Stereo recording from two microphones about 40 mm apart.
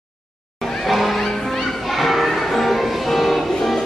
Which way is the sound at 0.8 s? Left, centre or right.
Centre.